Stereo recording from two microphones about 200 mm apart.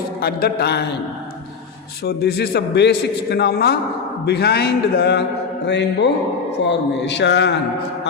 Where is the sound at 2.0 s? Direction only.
55° left (ahead or behind).